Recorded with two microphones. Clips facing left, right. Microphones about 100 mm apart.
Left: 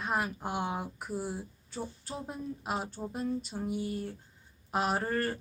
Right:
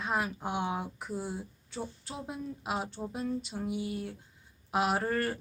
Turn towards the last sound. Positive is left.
turn(degrees=0)  # may be behind; listen again after turning